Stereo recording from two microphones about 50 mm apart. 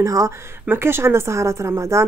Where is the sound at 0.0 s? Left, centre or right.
Right.